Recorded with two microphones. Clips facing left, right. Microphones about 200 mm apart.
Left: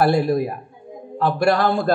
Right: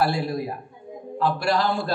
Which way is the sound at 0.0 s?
55° left (ahead or behind).